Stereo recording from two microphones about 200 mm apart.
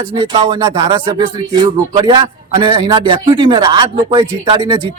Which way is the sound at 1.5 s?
25° right (ahead or behind).